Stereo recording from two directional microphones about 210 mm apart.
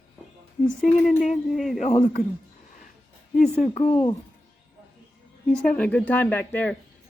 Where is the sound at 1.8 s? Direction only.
35° left (ahead or behind).